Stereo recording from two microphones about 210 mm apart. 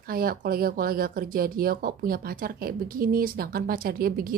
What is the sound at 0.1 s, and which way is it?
A woman's voice, 45° right (ahead or behind).